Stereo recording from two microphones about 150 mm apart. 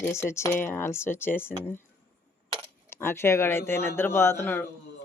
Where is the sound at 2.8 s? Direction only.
15° left (ahead or behind).